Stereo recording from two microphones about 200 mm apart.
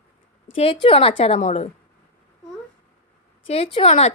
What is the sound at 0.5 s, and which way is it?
A woman's voice, 25° left (ahead or behind).